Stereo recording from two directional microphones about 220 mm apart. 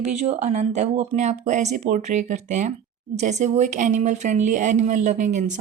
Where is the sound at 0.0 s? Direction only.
30° right (ahead or behind).